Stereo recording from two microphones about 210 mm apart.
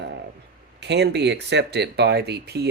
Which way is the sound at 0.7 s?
55° right (ahead or behind).